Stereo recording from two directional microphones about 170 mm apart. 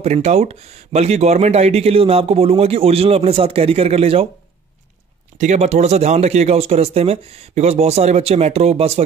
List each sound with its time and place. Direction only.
0.0 s speech: 40° right (ahead or behind)
5.4 s speech: 40° right (ahead or behind)